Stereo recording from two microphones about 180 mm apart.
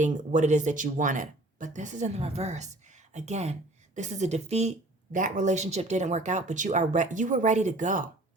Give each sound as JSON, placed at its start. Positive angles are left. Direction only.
{"t": 0.0, "sound": "a woman's voice", "side_deg": -45}